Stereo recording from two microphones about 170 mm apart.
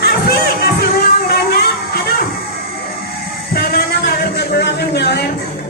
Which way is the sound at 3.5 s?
65° left (ahead or behind).